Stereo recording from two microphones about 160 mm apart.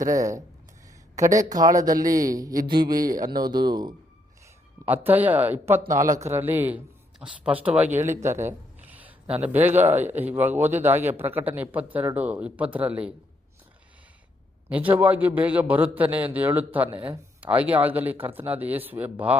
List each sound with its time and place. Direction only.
0.1 s a man's voice: 20° right (ahead or behind)
4.9 s speech: 10° right (ahead or behind)
8.2 s a sound: 15° right (ahead or behind)
9.3 s speech: 10° right (ahead or behind)
14.7 s speech: 10° right (ahead or behind)